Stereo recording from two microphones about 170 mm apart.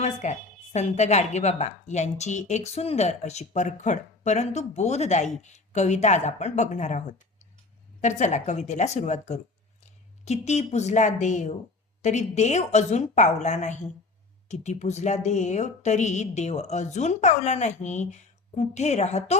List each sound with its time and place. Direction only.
0.0 s a woman's voice: 45° left (ahead or behind)